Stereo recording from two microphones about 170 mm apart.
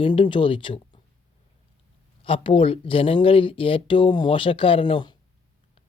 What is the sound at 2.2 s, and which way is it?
Speech, 30° left (ahead or behind).